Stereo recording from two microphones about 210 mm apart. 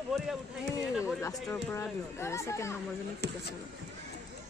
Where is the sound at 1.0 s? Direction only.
15° left (ahead or behind).